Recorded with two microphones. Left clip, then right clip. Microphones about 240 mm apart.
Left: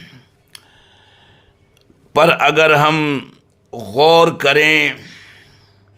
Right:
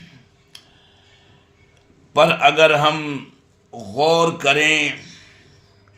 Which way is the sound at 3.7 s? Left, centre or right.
Left.